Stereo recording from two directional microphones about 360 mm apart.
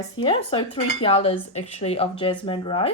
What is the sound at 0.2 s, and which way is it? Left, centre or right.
Cutlery, centre.